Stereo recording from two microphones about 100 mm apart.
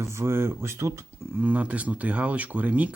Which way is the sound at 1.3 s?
15° right (ahead or behind).